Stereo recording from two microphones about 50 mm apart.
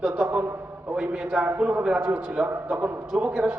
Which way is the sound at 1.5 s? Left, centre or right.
Right.